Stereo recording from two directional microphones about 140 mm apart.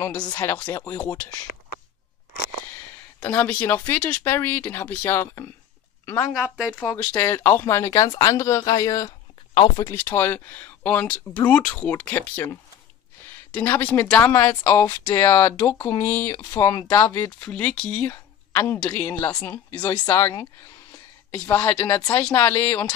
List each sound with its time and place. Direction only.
0.2 s speech: 30° left (ahead or behind)
0.5 s speech: 10° left (ahead or behind)
0.7 s speech: 25° left (ahead or behind)
3.2 s a woman's voice: 15° left (ahead or behind)
16.4 s speech: 25° left (ahead or behind)
21.7 s speech: 30° left (ahead or behind)
22.2 s speech: 15° left (ahead or behind)